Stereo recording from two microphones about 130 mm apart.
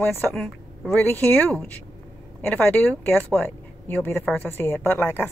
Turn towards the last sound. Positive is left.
turn(degrees=15)  # may be behind; listen again after turning